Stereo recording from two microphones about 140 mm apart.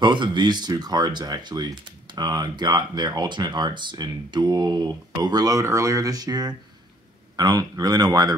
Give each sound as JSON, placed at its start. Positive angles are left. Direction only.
{"t": 0.0, "sound": "speech", "side_deg": -35}